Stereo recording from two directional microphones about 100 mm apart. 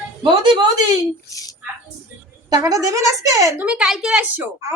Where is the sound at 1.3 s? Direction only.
35° left (ahead or behind).